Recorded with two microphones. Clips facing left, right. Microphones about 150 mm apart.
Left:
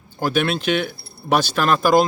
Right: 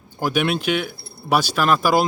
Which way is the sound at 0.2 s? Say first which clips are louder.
Even; 10° right (ahead or behind).